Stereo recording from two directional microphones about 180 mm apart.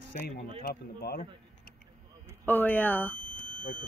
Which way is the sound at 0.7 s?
60° left (ahead or behind).